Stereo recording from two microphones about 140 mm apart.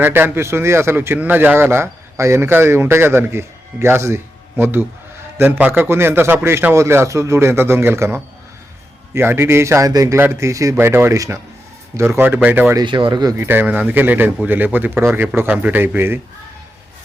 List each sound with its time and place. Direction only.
0.0 s a man's voice: 15° right (ahead or behind)
12.7 s speech: 35° right (ahead or behind)
13.3 s a man's voice: 15° right (ahead or behind)